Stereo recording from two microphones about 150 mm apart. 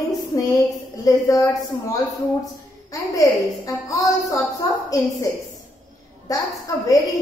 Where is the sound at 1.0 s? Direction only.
20° left (ahead or behind).